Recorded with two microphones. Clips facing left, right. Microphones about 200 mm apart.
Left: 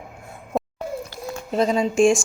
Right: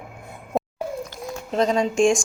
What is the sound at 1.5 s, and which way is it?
Speech, 5° left (ahead or behind).